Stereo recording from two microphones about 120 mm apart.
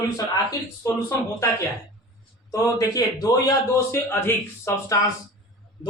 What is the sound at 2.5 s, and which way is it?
Speech, 30° left (ahead or behind).